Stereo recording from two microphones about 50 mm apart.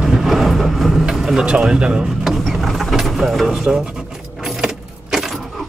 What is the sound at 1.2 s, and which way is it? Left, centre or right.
Speech, centre.